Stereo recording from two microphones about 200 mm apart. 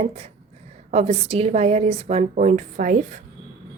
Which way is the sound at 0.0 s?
30° right (ahead or behind).